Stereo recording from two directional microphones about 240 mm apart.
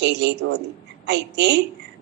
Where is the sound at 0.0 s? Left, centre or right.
Right.